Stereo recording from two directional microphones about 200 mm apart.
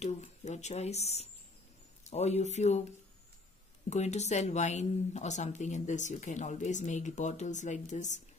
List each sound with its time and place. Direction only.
0.0 s speech: 35° left (ahead or behind)
3.9 s speech: 35° left (ahead or behind)